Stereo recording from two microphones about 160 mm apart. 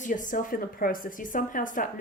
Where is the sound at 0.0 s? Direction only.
55° left (ahead or behind).